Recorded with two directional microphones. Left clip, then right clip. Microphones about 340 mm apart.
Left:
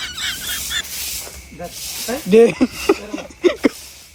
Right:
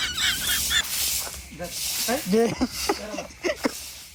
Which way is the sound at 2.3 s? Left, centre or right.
Centre.